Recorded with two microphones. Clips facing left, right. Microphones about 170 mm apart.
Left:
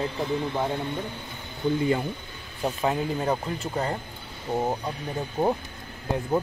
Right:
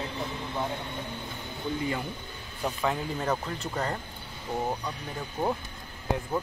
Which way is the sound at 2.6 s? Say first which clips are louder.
Left 4 dB; 20° left (ahead or behind).